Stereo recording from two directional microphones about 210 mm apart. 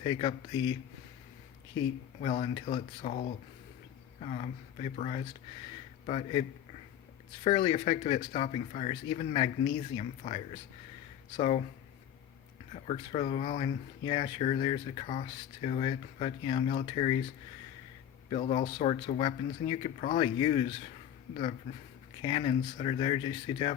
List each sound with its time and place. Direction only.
0.0 s speech: 25° left (ahead or behind)
2.2 s speech: 25° left (ahead or behind)
7.4 s speech: 25° left (ahead or behind)
12.7 s speech: 30° left (ahead or behind)
18.3 s speech: 30° left (ahead or behind)
22.2 s speech: 25° left (ahead or behind)